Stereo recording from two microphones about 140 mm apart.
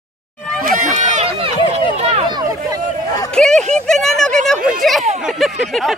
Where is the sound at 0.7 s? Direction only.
65° right (ahead or behind).